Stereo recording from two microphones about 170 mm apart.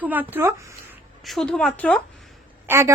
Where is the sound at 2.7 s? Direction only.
15° right (ahead or behind).